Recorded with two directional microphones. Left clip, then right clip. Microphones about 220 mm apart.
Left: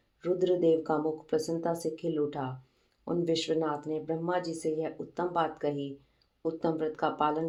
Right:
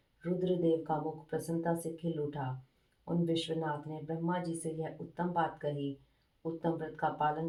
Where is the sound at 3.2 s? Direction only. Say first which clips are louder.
Left 5 dB; 40° left (ahead or behind).